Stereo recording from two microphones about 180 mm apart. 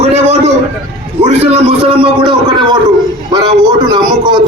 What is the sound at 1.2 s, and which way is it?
A man's voice, 35° right (ahead or behind).